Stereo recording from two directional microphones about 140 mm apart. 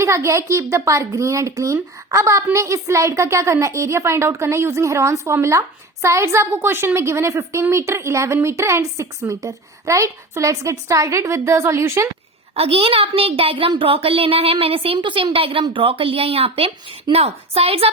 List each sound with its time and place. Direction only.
0.0 s a child's voice: 20° right (ahead or behind)
12.5 s a child's voice: 40° right (ahead or behind)